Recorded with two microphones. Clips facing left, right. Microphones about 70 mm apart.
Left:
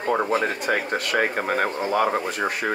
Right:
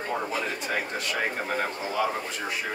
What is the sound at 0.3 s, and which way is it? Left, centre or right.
Speech, left.